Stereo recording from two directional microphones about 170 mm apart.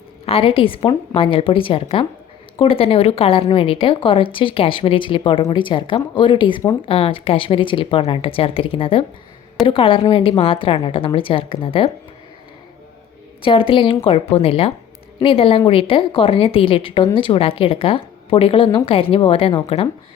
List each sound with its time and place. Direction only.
0.3 s speech: 35° left (ahead or behind)
13.4 s speech: 30° left (ahead or behind)